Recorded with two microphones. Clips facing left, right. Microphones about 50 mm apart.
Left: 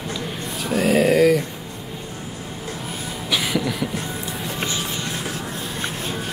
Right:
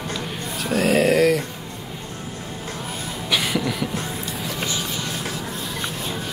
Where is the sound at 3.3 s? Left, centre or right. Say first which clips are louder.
Even; centre.